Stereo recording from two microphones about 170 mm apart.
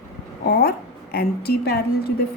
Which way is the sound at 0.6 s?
65° left (ahead or behind).